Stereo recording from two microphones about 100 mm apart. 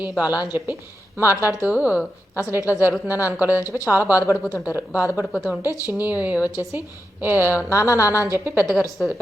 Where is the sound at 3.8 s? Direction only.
20° right (ahead or behind).